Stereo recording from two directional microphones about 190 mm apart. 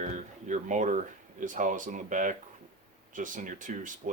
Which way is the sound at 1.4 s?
45° right (ahead or behind).